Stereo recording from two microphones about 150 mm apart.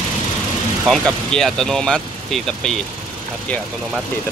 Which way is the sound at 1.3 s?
5° left (ahead or behind).